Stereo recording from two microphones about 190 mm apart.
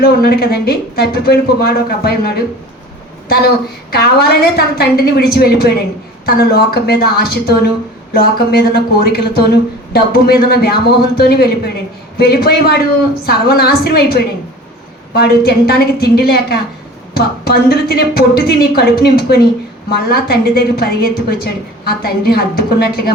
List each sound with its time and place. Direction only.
0.0 s a woman's voice: 55° left (ahead or behind)
3.9 s a woman's voice: 55° left (ahead or behind)